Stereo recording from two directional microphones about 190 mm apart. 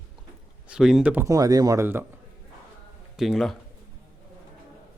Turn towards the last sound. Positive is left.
turn(degrees=0)  # may be behind; listen again after turning